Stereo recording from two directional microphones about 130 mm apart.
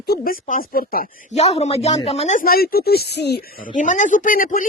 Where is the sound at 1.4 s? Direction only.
55° left (ahead or behind).